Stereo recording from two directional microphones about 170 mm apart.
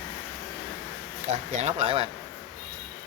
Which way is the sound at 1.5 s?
40° right (ahead or behind).